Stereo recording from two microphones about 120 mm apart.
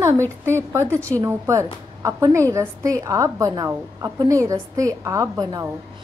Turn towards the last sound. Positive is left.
turn(degrees=-30)  # may be behind; listen again after turning